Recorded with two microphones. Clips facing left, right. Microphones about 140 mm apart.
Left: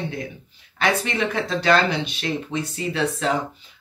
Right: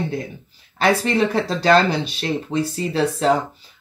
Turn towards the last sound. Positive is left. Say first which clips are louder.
# right 5 dB
turn(degrees=-35)  # may be behind; listen again after turning